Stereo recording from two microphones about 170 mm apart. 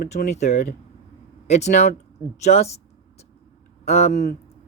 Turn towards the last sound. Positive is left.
turn(degrees=40)  # may be behind; listen again after turning